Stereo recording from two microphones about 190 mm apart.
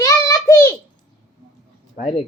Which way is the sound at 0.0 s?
15° left (ahead or behind).